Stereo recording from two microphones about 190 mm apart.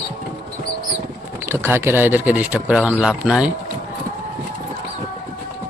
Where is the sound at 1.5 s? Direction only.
10° right (ahead or behind).